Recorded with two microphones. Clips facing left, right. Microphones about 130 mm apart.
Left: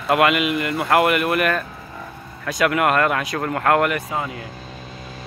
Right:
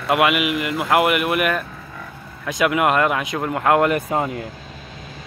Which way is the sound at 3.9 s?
45° right (ahead or behind).